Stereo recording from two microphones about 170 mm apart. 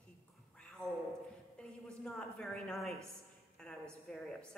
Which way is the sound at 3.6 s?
5° left (ahead or behind).